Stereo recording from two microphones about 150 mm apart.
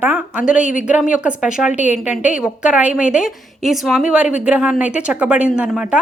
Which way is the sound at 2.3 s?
5° right (ahead or behind).